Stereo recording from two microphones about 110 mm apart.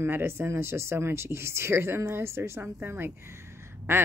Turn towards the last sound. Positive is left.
turn(degrees=-20)  # may be behind; listen again after turning